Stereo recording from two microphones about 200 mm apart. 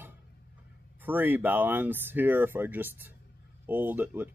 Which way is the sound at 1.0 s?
10° right (ahead or behind).